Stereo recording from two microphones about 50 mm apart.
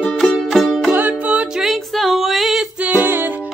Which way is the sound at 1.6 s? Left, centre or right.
Centre.